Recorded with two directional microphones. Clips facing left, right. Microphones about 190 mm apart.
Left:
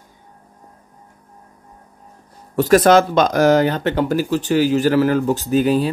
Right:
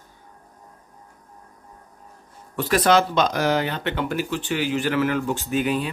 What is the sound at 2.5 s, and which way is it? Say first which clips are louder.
Speech: left 7 dB; 45° left (ahead or behind).